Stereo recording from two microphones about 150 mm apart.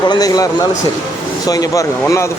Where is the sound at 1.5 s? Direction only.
25° left (ahead or behind).